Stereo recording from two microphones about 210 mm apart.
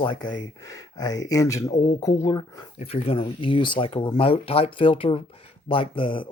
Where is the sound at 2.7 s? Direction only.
30° left (ahead or behind).